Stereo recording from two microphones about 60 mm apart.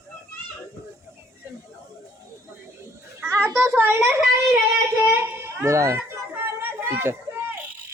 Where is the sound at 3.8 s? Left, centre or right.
Right.